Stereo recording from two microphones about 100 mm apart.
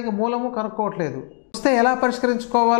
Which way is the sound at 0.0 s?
15° left (ahead or behind).